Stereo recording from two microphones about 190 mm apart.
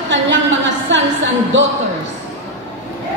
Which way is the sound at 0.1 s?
75° right (ahead or behind).